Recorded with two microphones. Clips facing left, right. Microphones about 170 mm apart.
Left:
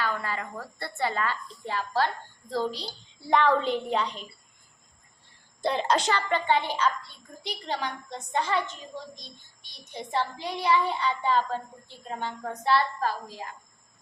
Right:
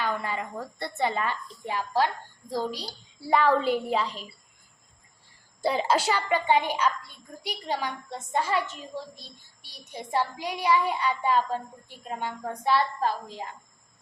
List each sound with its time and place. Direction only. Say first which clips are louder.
0.0 s a woman's voice: right 1 dB; 20° right (ahead or behind); by 4.3 s 5° right (ahead or behind)
5.6 s speech: right 1 dB; 5° right (ahead or behind)
9.6 s speech: even; 10° right (ahead or behind)